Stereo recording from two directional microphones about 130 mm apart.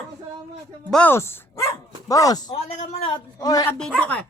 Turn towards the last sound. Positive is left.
turn(degrees=10)  # may be behind; listen again after turning